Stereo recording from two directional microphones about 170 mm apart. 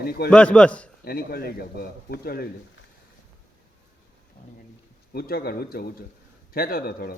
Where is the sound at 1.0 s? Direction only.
65° left (ahead or behind).